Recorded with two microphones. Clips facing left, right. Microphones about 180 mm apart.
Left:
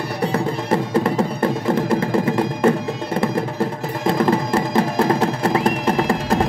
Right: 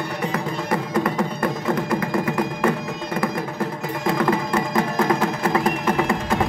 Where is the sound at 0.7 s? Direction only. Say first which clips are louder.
Left 4 dB; 25° left (ahead or behind).